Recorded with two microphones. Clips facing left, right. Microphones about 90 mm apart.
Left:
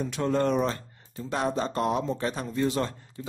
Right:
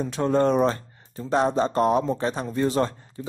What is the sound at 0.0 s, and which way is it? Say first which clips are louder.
A man's voice: right 4 dB; 30° right (ahead or behind).